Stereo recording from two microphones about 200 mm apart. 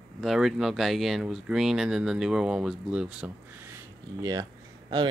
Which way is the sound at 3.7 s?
20° right (ahead or behind).